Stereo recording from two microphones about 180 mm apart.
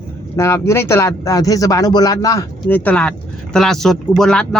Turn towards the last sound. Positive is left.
turn(degrees=5)  # may be behind; listen again after turning